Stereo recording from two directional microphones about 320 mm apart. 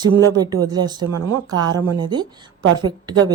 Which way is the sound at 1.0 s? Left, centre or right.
Right.